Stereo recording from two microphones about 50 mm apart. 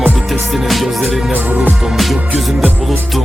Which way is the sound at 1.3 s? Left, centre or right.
Right.